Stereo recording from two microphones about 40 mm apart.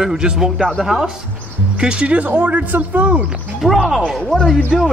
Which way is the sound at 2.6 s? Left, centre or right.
Right.